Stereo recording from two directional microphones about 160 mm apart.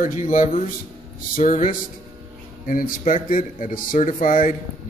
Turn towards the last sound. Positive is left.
turn(degrees=60)  # may be behind; listen again after turning